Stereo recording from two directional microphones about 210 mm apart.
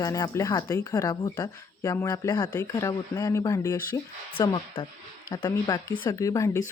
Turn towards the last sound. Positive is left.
turn(degrees=15)  # may be behind; listen again after turning